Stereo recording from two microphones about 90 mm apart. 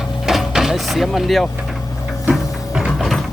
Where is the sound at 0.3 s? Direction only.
5° right (ahead or behind).